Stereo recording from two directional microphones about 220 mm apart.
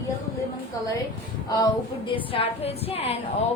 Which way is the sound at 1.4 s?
15° left (ahead or behind).